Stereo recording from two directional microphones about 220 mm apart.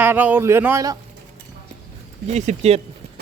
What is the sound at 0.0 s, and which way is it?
Speech, 10° right (ahead or behind).